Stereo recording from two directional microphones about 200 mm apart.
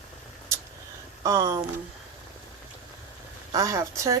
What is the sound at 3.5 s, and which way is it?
Speech, 15° right (ahead or behind).